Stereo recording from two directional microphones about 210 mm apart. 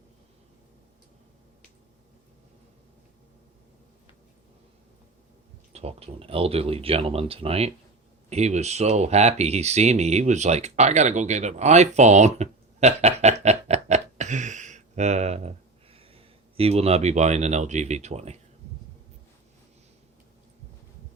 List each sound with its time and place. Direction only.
5.7 s speech: 30° right (ahead or behind)